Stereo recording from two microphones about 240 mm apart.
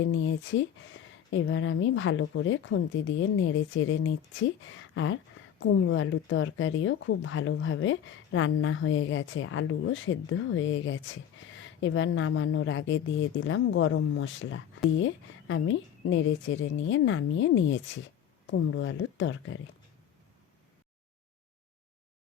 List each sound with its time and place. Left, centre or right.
0.0 s speech: left